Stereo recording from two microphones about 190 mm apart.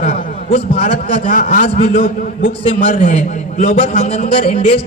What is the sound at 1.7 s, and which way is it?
Speech, 30° left (ahead or behind).